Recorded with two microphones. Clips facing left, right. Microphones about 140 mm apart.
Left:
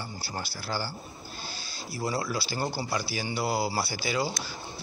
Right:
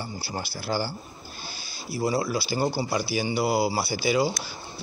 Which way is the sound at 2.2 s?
15° right (ahead or behind).